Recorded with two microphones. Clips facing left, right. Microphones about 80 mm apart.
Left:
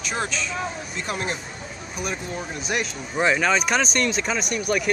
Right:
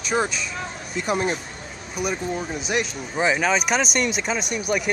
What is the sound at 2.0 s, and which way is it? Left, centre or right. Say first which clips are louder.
Speech: right 4 dB; centre.